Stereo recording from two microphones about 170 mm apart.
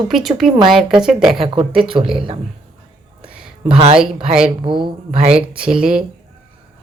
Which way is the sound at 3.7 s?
35° right (ahead or behind).